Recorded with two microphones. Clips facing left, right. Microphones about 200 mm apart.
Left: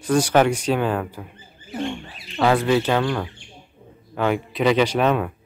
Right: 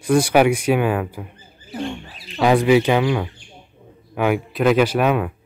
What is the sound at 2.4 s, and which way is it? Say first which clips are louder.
Speech: right 4 dB; 15° right (ahead or behind).